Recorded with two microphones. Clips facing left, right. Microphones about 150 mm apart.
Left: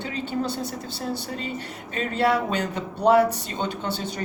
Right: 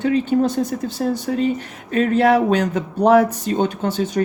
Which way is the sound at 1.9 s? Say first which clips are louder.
Right 8 dB; 55° right (ahead or behind).